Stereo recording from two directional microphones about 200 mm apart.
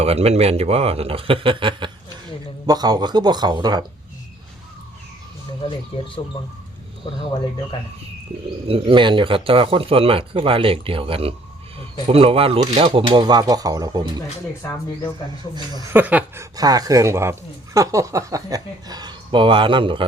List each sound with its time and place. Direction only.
0.0 s speech: 30° right (ahead or behind)
5.6 s speech: 25° left (ahead or behind)
8.6 s speech: 25° right (ahead or behind)
14.6 s speech: 15° left (ahead or behind)
15.5 s speech: 20° right (ahead or behind)